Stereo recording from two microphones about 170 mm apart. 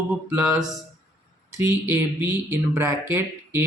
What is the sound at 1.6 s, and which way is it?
Speech, 10° right (ahead or behind).